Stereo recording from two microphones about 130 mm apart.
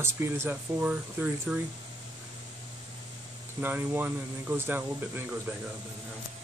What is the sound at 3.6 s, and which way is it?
Speech, 15° right (ahead or behind).